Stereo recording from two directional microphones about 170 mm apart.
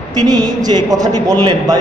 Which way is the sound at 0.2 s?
25° right (ahead or behind).